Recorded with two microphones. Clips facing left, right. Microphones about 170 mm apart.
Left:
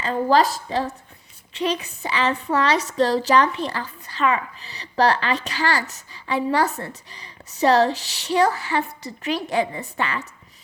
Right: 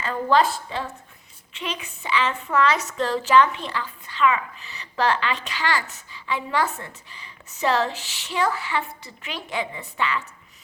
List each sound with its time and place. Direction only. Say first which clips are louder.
0.0 s a woman's voice: left 2 dB; 35° left (ahead or behind)